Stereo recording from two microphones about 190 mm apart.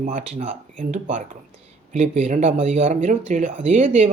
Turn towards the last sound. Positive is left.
turn(degrees=-40)  # may be behind; listen again after turning